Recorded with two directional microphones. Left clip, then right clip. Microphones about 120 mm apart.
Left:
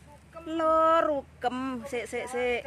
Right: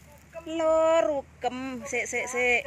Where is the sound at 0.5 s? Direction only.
25° left (ahead or behind).